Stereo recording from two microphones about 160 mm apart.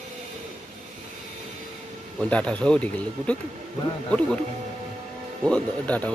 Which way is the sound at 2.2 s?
5° left (ahead or behind).